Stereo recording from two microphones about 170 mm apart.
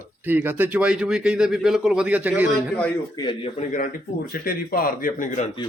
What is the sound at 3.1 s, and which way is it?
Speech, 30° left (ahead or behind).